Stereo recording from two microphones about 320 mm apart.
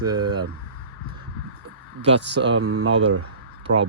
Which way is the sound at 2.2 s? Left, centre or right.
Right.